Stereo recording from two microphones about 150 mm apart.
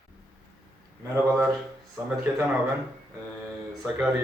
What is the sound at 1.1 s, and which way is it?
Speech, 15° right (ahead or behind).